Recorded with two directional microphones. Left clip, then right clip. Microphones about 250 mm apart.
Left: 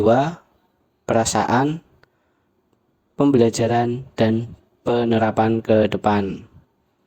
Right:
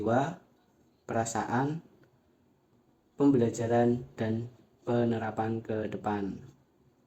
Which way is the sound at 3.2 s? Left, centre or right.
Left.